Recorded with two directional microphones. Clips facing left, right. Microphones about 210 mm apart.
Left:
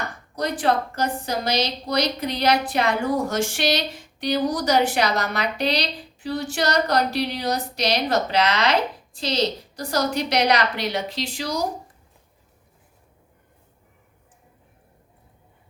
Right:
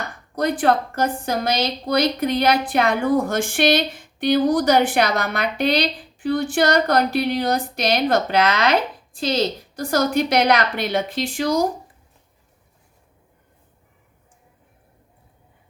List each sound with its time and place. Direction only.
0.3 s a woman's voice: 55° right (ahead or behind)